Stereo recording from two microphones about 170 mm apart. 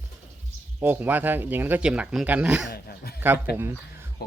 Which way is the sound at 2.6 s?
65° left (ahead or behind).